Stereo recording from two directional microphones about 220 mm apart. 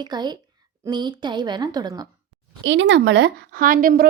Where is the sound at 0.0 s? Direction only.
20° right (ahead or behind).